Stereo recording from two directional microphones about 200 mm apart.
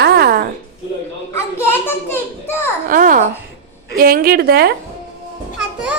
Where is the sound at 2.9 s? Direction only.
45° right (ahead or behind).